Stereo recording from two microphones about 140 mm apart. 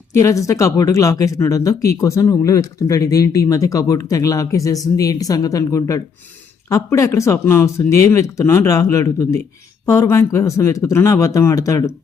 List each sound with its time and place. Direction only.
0.1 s speech: 20° left (ahead or behind)